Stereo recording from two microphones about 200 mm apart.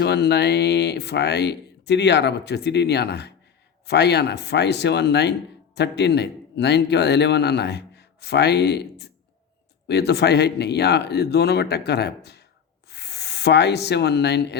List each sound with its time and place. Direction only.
0.0 s a man's voice: 55° left (ahead or behind)